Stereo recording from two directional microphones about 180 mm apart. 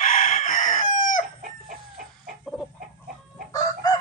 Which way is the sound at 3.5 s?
20° left (ahead or behind).